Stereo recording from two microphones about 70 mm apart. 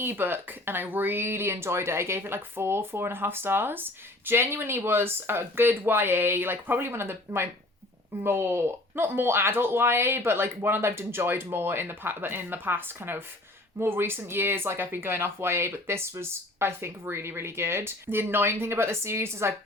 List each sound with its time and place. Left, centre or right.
0.0 s speech: right
8.2 s speech: right